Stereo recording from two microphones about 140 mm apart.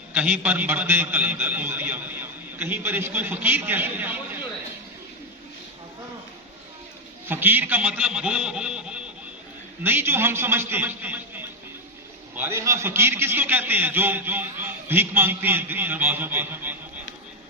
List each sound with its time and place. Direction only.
0.1 s a man's voice: 10° right (ahead or behind)
7.3 s a man's voice: 15° right (ahead or behind)